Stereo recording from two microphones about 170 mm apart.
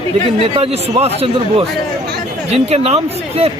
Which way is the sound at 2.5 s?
35° right (ahead or behind).